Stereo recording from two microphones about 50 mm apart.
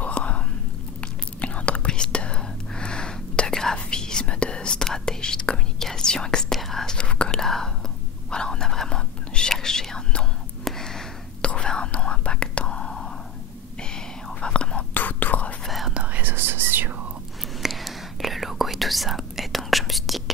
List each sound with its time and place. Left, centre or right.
0.0 s whispering: left
6.5 s whispering: centre
7.0 s whispering: left
7.3 s whispering: centre
10.6 s a sound: centre
11.4 s whispering: centre
13.9 s whispering: centre
15.0 s whispering: left
15.6 s whispering: centre
15.9 s whispering: right
16.3 s whispering: right
17.6 s whispering: centre